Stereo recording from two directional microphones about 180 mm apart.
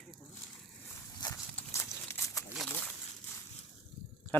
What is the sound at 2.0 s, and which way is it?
Crumpling, 15° left (ahead or behind).